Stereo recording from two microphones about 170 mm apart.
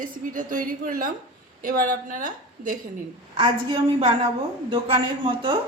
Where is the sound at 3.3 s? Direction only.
30° right (ahead or behind).